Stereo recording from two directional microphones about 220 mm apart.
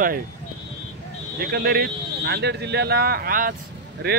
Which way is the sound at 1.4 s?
45° right (ahead or behind).